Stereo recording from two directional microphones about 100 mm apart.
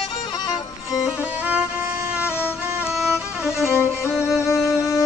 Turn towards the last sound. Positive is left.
turn(degrees=25)  # may be behind; listen again after turning